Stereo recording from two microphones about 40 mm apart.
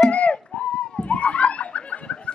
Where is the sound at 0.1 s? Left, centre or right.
Left.